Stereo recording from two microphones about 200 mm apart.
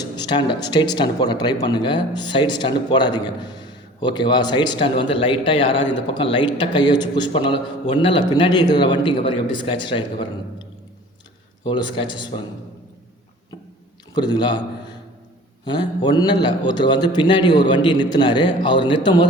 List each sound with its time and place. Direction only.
0.0 s speech: 20° left (ahead or behind)
14.2 s speech: 20° left (ahead or behind)
15.6 s speech: 25° left (ahead or behind)